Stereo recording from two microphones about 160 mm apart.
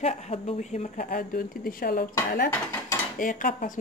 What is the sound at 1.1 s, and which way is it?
Speech, 65° left (ahead or behind).